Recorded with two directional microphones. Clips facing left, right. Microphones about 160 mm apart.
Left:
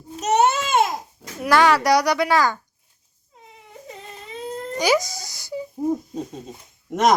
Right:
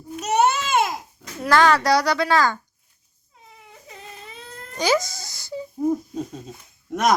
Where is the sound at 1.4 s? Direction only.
10° left (ahead or behind).